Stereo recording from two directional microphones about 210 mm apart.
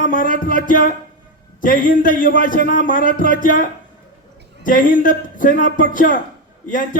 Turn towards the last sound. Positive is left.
turn(degrees=40)  # may be behind; listen again after turning